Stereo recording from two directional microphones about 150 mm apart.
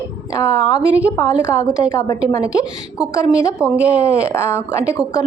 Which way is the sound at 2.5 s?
5° right (ahead or behind).